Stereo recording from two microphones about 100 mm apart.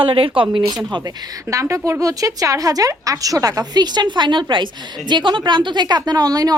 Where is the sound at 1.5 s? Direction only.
30° right (ahead or behind).